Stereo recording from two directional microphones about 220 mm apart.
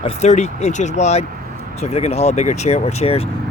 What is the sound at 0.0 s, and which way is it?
Speech, 30° left (ahead or behind).